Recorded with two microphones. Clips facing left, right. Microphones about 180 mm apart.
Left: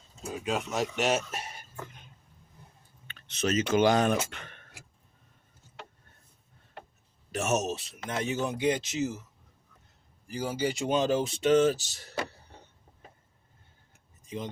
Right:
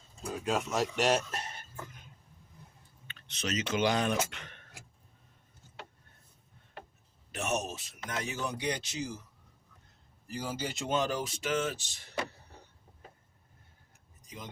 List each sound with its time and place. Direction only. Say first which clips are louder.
0.2 s speech: even; 5° left (ahead or behind)
3.2 s speech: left 7 dB; 50° left (ahead or behind)
7.3 s speech: left 5 dB; 45° left (ahead or behind)
7.9 s speech: left 6 dB; 25° left (ahead or behind)
10.2 s speech: left 6 dB; 10° left (ahead or behind); by 11.8 s 35° left (ahead or behind)
14.2 s a sound: left 9 dB; 25° left (ahead or behind)